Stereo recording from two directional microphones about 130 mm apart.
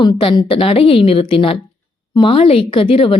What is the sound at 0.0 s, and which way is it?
A woman's voice, 40° left (ahead or behind).